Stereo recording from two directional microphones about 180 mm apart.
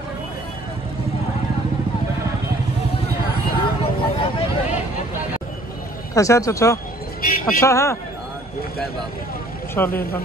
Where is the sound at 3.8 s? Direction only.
30° left (ahead or behind).